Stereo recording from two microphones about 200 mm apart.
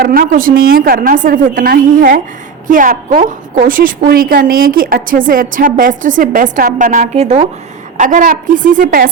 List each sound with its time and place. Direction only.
0.0 s a woman's voice: 45° right (ahead or behind)